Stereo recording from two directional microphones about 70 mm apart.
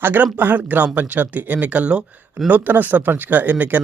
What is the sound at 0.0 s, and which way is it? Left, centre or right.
Speech, right.